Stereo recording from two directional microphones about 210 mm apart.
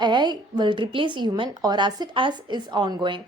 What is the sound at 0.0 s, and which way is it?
A woman's voice, 20° right (ahead or behind).